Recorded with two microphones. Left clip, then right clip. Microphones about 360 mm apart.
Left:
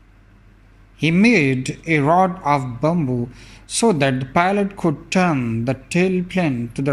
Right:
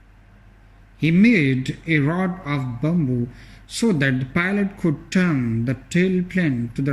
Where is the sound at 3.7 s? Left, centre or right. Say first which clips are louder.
Left 4 dB; centre.